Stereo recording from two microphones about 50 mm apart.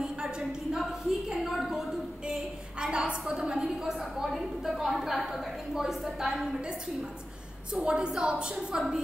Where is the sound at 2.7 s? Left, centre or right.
Centre.